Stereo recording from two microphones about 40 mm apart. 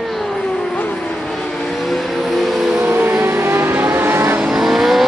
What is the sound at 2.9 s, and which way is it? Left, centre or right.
Vehicle, right.